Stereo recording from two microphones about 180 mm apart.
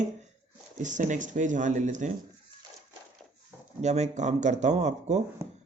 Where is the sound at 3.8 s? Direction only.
40° right (ahead or behind).